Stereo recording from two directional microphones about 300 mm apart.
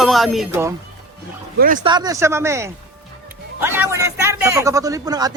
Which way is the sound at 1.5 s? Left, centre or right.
Right.